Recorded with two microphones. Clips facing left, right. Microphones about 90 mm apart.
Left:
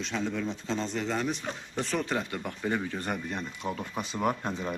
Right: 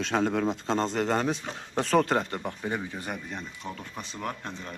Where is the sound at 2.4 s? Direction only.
15° right (ahead or behind).